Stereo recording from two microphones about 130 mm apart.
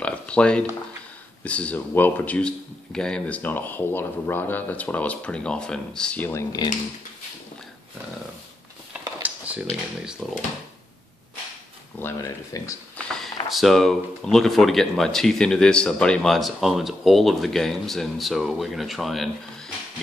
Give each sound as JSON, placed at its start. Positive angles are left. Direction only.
{"t": 0.0, "sound": "speech", "side_deg": 10}
{"t": 9.2, "sound": "a sound", "side_deg": -10}
{"t": 10.2, "sound": "speech", "side_deg": 0}
{"t": 12.0, "sound": "speech", "side_deg": 20}
{"t": 13.1, "sound": "speech", "side_deg": 0}